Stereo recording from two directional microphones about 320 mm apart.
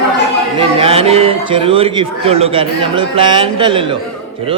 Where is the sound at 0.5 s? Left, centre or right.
Centre.